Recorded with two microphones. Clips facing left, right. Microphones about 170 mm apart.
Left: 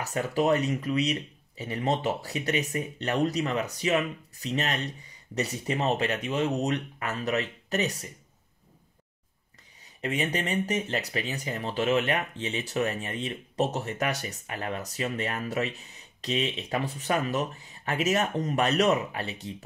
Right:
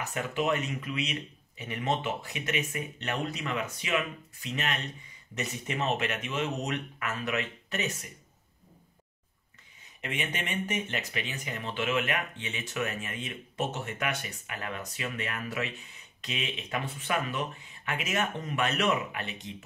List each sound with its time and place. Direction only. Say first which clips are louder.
0.0 s speech: left 4 dB; 35° left (ahead or behind)
10.0 s speech: left 6 dB; 35° left (ahead or behind)